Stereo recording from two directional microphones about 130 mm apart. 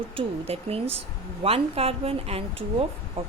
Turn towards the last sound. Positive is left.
turn(degrees=-50)  # may be behind; listen again after turning